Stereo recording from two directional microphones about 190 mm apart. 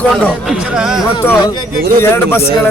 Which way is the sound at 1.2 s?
20° left (ahead or behind).